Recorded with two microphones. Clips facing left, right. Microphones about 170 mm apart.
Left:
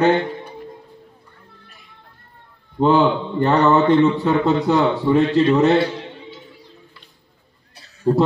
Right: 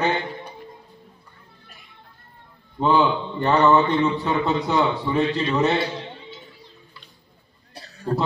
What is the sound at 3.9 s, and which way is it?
A man's voice, 55° left (ahead or behind).